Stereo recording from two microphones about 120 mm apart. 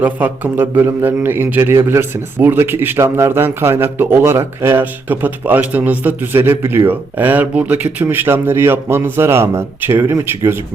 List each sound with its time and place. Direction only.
0.0 s a man's voice: 15° right (ahead or behind)